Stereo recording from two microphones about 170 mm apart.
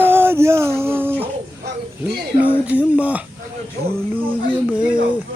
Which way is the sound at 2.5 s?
10° right (ahead or behind).